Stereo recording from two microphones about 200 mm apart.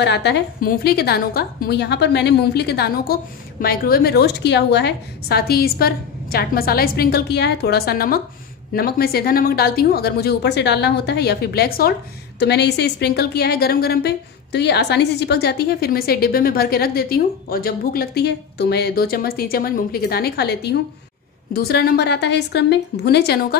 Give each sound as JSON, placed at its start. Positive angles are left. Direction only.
{"t": 0.0, "sound": "a woman's voice", "side_deg": 60}